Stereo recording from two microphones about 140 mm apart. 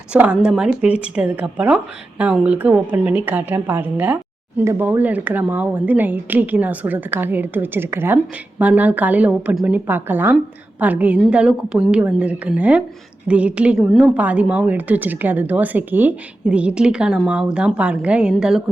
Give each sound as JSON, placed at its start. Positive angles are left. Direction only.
{"t": 0.1, "sound": "a woman's voice", "side_deg": -10}